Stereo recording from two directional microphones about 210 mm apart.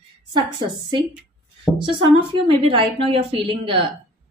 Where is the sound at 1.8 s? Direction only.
25° right (ahead or behind).